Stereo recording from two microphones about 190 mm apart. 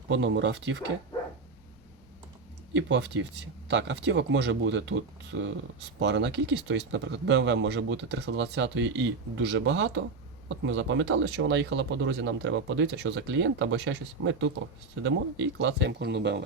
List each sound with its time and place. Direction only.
0.1 s speech: 70° right (ahead or behind)
2.7 s speech: 70° right (ahead or behind)